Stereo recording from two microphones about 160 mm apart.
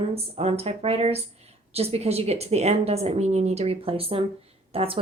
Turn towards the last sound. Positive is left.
turn(degrees=-35)  # may be behind; listen again after turning